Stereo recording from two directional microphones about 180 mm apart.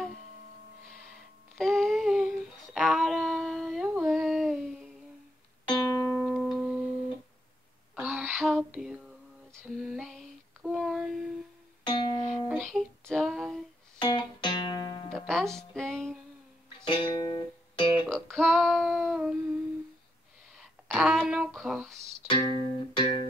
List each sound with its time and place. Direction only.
1.6 s humming: centre (ahead or behind)
5.8 s music: centre (ahead or behind)
7.9 s a sound: 5° right (ahead or behind)
8.3 s lullaby: 5° left (ahead or behind)
11.8 s music: 25° left (ahead or behind)
12.3 s music: centre (ahead or behind)
13.9 s music: 25° left (ahead or behind)
15.1 s music: 5° left (ahead or behind)
16.8 s music: 25° left (ahead or behind)
18.0 s female singing: centre (ahead or behind)
20.9 s a sound: centre (ahead or behind)
22.3 s music: 25° left (ahead or behind)